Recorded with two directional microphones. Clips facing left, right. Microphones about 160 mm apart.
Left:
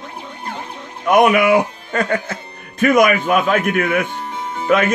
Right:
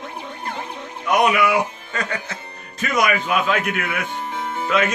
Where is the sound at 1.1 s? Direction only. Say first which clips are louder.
Left 5 dB; 50° left (ahead or behind).